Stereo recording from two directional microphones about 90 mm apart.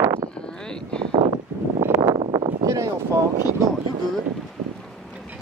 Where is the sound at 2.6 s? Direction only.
40° right (ahead or behind).